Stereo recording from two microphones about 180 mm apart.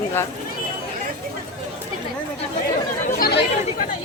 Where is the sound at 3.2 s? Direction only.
60° left (ahead or behind).